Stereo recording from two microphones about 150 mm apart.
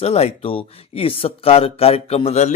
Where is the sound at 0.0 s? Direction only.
45° left (ahead or behind).